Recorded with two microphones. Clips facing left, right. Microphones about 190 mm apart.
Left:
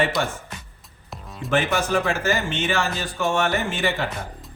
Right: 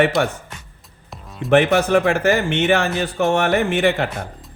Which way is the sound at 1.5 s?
65° right (ahead or behind).